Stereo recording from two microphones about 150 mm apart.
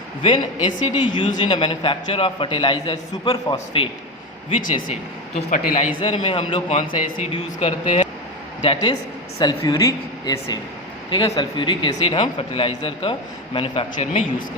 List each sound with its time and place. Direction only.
0.2 s speech: 30° left (ahead or behind)
4.9 s speech: 55° left (ahead or behind)
6.0 s speech: 35° left (ahead or behind)